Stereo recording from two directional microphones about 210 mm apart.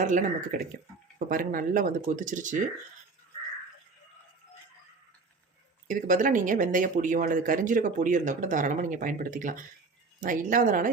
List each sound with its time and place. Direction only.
0.0 s speech: 40° right (ahead or behind)
5.9 s speech: 40° right (ahead or behind)